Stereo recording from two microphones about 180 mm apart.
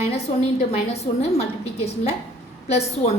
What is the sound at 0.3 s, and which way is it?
A woman's voice, 35° left (ahead or behind).